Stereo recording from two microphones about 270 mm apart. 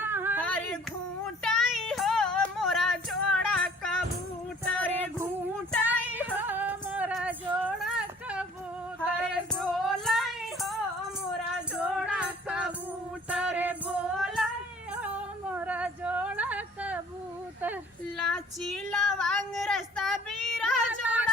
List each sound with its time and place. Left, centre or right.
0.0 s female singing: centre
0.4 s female singing: centre
4.6 s music: centre
5.9 s female singing: centre
9.6 s music: centre
11.8 s music: centre
15.0 s female singing: centre
18.2 s female singing: centre